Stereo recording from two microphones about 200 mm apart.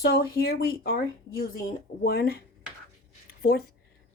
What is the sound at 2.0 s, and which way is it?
Speech, 50° left (ahead or behind).